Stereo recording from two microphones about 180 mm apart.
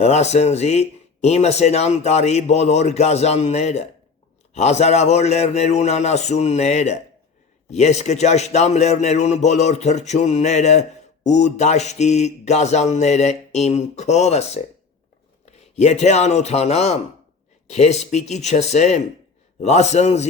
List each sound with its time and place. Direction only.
0.0 s a man's voice: 40° left (ahead or behind)